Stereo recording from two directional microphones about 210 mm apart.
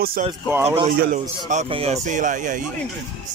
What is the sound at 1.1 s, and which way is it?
Speech, 35° right (ahead or behind).